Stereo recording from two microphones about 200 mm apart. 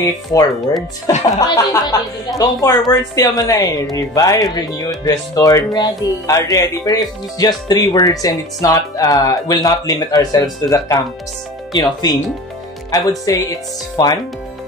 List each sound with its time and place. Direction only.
0.0 s speech: 20° left (ahead or behind)
13.3 s speech: 15° left (ahead or behind)